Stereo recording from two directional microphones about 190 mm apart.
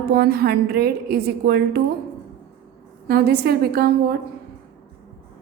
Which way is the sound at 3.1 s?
55° right (ahead or behind).